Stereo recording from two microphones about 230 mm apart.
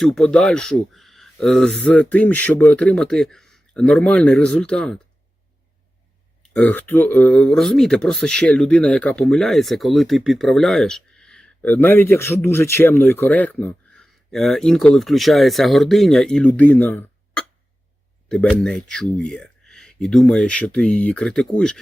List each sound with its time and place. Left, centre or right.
0.0 s speech: centre
6.4 s speech: centre